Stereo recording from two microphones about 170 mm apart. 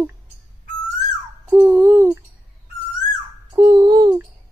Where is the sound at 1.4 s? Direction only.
15° right (ahead or behind).